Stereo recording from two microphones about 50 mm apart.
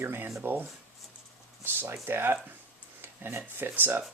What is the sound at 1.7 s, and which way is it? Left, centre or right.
Speech, right.